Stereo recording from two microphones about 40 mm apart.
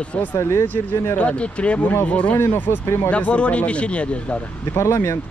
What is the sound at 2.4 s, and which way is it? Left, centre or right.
Speech, left.